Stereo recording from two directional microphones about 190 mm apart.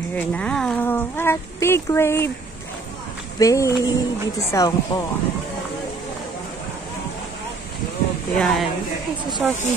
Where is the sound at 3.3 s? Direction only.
15° left (ahead or behind).